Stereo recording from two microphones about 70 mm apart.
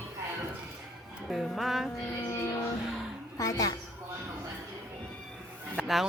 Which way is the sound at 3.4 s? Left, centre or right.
Left.